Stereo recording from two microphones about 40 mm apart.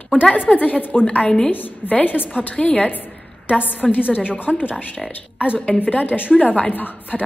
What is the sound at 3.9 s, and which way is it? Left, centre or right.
Speech, left.